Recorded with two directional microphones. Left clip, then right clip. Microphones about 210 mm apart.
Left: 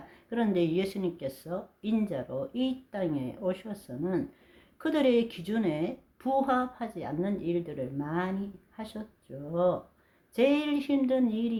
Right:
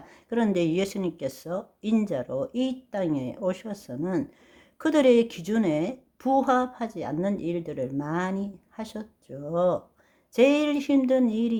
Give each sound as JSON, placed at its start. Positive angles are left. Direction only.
{"t": 0.1, "sound": "a woman's voice", "side_deg": -40}